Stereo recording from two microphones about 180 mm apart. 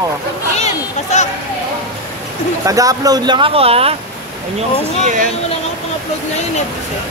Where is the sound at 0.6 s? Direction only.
40° left (ahead or behind).